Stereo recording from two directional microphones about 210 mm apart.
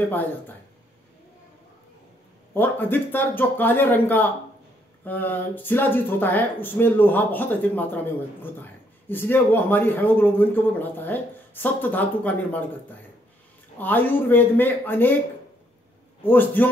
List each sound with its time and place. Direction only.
0.1 s a man's voice: 10° left (ahead or behind)
2.5 s a man's voice: 10° left (ahead or behind)
16.2 s a man's voice: 10° left (ahead or behind)